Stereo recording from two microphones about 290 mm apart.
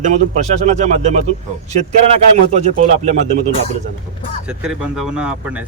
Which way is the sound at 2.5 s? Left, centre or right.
Right.